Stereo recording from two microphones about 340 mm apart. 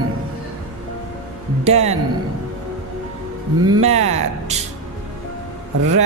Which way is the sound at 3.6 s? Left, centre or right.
Centre.